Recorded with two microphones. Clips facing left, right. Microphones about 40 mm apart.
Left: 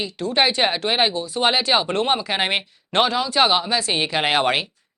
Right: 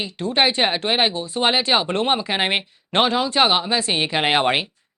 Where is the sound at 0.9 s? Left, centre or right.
Centre.